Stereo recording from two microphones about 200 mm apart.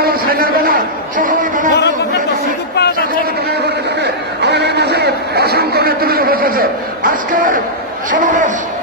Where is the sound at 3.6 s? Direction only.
55° right (ahead or behind).